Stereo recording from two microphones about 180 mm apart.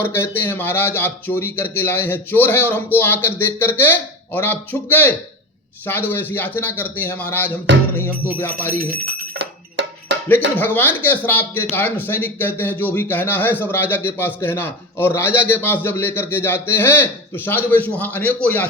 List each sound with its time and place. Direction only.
0.0 s a man's voice: 10° left (ahead or behind)
9.4 s music: 80° right
10.2 s a man's voice: 10° left (ahead or behind)